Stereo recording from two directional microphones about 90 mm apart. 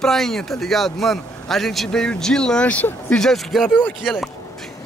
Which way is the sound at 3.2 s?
Centre (ahead or behind).